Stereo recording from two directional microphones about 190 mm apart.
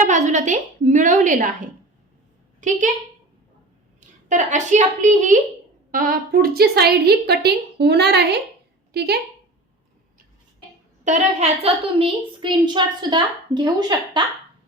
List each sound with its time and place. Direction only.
0.0 s a woman's voice: 40° right (ahead or behind)
4.3 s a woman's voice: 40° right (ahead or behind); by 9.2 s 60° right (ahead or behind)
11.0 s a woman's voice: 40° right (ahead or behind); by 14.2 s 20° right (ahead or behind)